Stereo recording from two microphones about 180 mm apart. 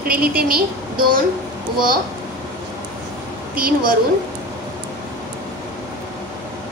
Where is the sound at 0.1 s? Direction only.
55° right (ahead or behind).